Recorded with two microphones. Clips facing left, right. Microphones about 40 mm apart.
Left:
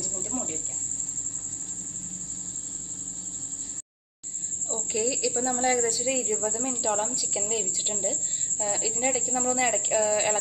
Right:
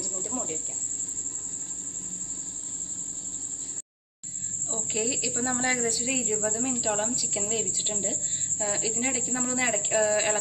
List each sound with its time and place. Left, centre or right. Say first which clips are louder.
0.0 s cricket: even; centre
4.9 s a woman's voice: left 3 dB; right